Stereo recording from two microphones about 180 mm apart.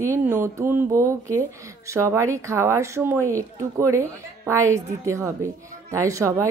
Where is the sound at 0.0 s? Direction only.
15° right (ahead or behind).